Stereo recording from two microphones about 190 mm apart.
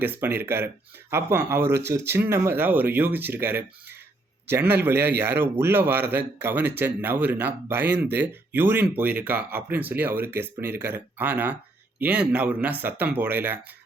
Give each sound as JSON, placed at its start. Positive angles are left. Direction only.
{"t": 0.0, "sound": "a man's voice", "side_deg": -10}